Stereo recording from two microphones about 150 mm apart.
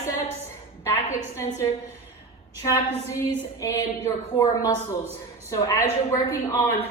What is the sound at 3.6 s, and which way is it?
Speech, 20° left (ahead or behind).